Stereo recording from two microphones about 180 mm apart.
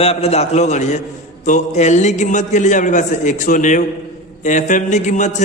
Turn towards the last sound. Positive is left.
turn(degrees=40)  # may be behind; listen again after turning